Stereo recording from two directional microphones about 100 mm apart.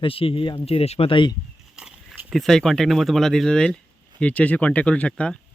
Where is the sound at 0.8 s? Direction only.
85° left; by 1.3 s 55° left (ahead or behind).